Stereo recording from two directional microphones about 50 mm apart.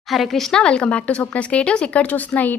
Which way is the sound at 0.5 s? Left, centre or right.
Centre.